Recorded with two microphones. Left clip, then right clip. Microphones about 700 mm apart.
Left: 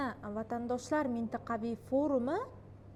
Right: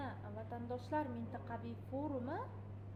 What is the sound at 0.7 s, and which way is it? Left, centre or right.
A woman's voice, left.